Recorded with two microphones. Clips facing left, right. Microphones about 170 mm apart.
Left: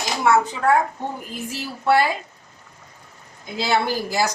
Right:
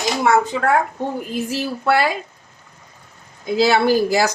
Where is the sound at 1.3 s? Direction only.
75° right (ahead or behind).